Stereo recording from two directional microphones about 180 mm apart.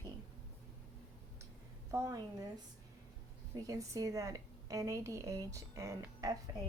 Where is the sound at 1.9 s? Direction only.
20° right (ahead or behind).